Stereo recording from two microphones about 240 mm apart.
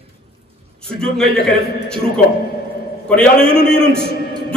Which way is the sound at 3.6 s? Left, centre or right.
Left.